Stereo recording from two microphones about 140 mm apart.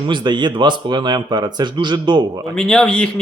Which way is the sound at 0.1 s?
35° right (ahead or behind).